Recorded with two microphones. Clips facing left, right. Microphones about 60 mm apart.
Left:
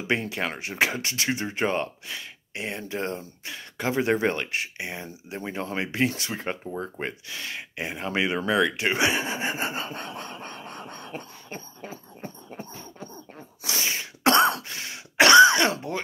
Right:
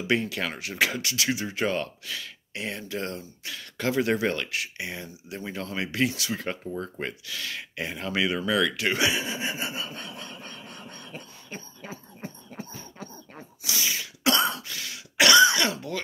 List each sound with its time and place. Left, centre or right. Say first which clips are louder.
0.0 s speech: even; left
11.8 s a sound: left 1 dB; right
13.7 s throat clearing: left 1 dB; left
14.7 s throat clearing: left 1 dB; left